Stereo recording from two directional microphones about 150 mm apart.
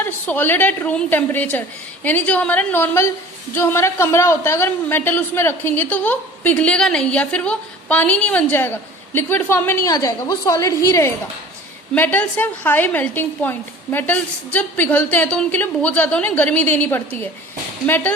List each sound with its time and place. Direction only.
0.0 s a woman's voice: 15° left (ahead or behind)